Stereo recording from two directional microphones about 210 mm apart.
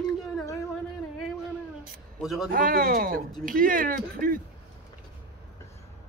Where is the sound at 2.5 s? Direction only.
40° right (ahead or behind).